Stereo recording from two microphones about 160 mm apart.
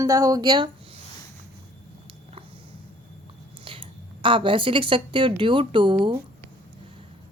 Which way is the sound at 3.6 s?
35° right (ahead or behind).